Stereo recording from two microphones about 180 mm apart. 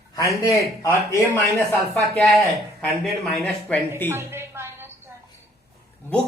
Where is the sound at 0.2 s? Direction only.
20° left (ahead or behind).